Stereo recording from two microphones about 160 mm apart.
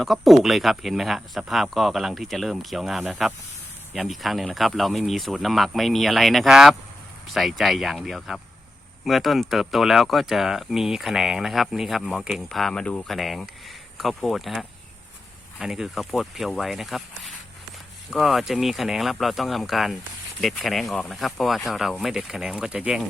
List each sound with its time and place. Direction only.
0.0 s speech: centre (ahead or behind)